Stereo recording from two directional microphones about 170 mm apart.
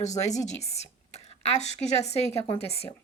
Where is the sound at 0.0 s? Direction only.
45° left (ahead or behind).